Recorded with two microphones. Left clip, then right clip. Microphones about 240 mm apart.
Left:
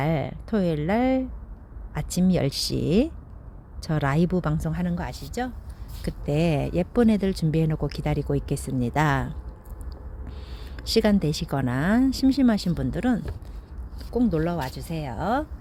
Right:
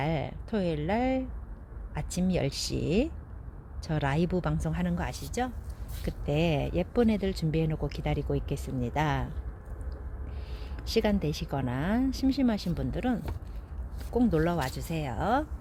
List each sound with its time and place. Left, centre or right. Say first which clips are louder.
0.0 s a woman's voice: left 5 dB; centre
10.8 s speech: left 6 dB; left
14.1 s a woman's voice: left 2 dB; centre